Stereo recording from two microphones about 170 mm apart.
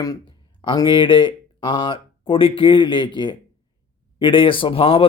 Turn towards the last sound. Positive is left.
turn(degrees=35)  # may be behind; listen again after turning